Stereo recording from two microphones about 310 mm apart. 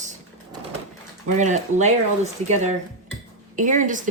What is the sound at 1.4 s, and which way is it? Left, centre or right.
Speech, right.